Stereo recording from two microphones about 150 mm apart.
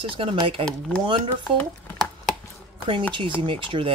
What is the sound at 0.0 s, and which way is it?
Speech, 35° right (ahead or behind).